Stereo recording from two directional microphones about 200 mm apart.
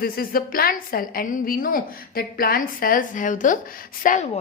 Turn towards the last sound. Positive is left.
turn(degrees=40)  # may be behind; listen again after turning